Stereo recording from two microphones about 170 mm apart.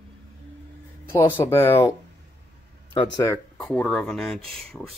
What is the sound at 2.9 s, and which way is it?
Speech, 25° left (ahead or behind).